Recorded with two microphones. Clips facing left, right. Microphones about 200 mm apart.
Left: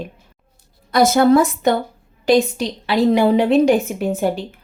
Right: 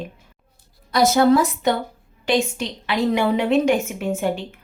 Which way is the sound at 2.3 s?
35° left (ahead or behind).